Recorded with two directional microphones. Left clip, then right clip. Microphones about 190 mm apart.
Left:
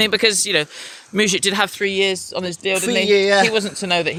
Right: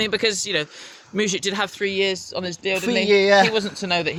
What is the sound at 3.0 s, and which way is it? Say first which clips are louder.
Speech: even; 5° right (ahead or behind).